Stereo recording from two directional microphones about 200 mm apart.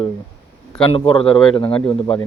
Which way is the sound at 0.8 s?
25° left (ahead or behind).